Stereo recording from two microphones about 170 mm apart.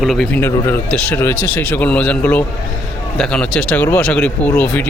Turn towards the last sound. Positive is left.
turn(degrees=10)  # may be behind; listen again after turning